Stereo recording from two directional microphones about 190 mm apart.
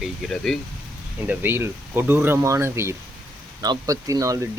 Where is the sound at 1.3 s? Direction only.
10° right (ahead or behind).